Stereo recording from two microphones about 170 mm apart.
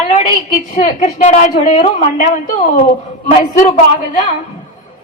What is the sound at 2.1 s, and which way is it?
Speech, 50° left (ahead or behind).